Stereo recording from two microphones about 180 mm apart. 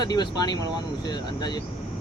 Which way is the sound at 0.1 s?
20° left (ahead or behind).